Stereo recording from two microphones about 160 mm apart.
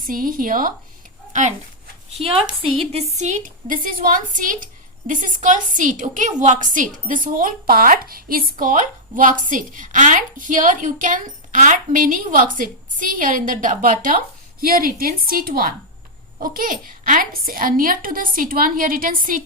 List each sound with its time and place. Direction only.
0.0 s a woman's voice: 60° right (ahead or behind)
2.1 s a woman's voice: 35° right (ahead or behind); by 19.4 s 60° right (ahead or behind)